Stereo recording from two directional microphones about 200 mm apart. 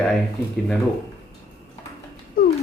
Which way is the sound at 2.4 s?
45° left (ahead or behind).